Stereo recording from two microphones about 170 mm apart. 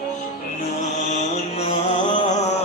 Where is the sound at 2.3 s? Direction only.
40° left (ahead or behind).